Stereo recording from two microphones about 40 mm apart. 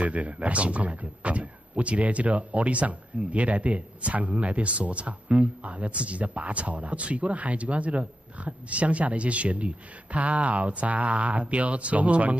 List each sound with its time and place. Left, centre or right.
0.0 s speech: right